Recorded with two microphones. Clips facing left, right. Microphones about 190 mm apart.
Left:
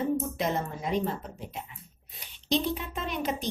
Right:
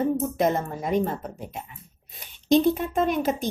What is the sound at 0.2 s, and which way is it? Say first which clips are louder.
A woman's voice: right 6 dB; 50° right (ahead or behind).